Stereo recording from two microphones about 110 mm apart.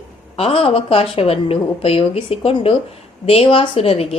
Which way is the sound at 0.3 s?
60° left (ahead or behind).